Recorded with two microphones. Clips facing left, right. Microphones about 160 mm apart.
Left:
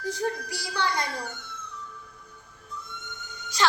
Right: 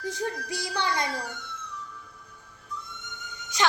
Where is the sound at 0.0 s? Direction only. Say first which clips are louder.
Left 2 dB; 20° right (ahead or behind).